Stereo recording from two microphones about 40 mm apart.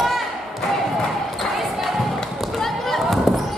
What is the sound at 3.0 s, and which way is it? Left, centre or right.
Basketball bounce, centre.